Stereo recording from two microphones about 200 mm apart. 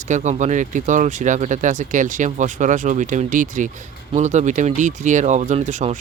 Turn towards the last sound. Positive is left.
turn(degrees=-35)  # may be behind; listen again after turning